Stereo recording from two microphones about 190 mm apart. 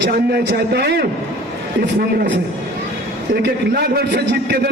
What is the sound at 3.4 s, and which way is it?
A man's voice, 60° right (ahead or behind).